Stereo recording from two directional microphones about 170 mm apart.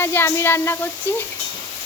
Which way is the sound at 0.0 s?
15° left (ahead or behind).